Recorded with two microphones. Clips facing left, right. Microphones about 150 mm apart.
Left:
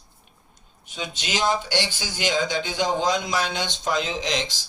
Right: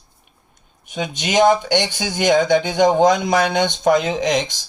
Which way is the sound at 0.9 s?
50° right (ahead or behind).